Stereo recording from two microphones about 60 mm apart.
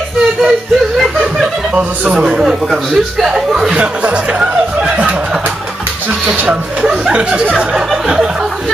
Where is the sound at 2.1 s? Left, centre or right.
Centre.